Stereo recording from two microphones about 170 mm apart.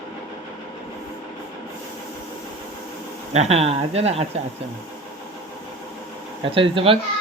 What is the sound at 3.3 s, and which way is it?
Speech, 40° right (ahead or behind).